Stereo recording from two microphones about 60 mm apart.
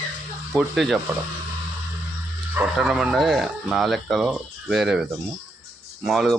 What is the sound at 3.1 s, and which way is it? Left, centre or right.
Speech, centre.